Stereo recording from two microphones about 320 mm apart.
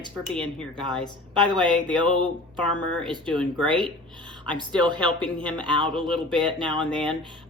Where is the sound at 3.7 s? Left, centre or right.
Centre.